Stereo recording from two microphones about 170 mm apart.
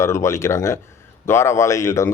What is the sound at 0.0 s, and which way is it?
A man's voice, 15° left (ahead or behind).